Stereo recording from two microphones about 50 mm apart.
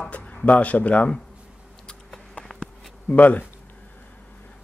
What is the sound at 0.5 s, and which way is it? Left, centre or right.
Speech, left.